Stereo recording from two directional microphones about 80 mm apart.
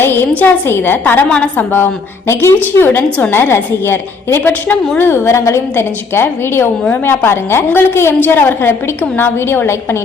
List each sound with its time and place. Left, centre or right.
0.0 s a woman's voice: left
1.3 s a woman's voice: centre
1.7 s a woman's voice: left